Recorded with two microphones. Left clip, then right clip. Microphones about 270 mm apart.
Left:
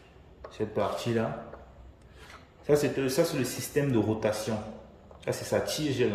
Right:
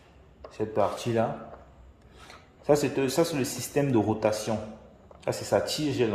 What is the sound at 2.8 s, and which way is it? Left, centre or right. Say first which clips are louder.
Speech: right 1 dB; centre.